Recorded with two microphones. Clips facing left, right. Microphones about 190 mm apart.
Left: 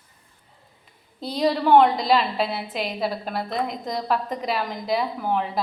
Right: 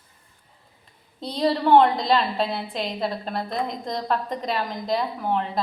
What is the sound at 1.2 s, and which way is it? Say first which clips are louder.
A woman's voice: even; 5° left (ahead or behind).